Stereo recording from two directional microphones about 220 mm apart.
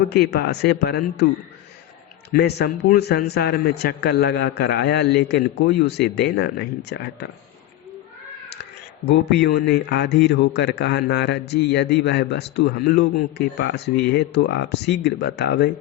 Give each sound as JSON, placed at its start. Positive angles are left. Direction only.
{"t": 0.1, "sound": "a man's voice", "side_deg": 45}
{"t": 2.3, "sound": "a man's voice", "side_deg": 45}
{"t": 9.0, "sound": "a man's voice", "side_deg": 50}